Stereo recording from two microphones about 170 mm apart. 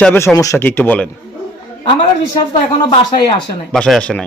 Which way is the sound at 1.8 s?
30° left (ahead or behind).